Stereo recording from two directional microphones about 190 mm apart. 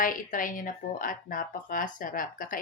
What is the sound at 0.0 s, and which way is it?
Speech, 45° left (ahead or behind).